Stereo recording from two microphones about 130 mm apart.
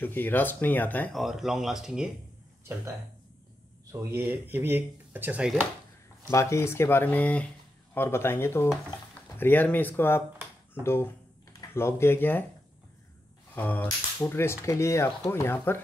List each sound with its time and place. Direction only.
0.0 s speech: 15° left (ahead or behind)
1.1 s speech: centre (ahead or behind)
3.9 s speech: 20° right (ahead or behind)
6.3 s speech: 20° left (ahead or behind)
13.6 s speech: 15° left (ahead or behind)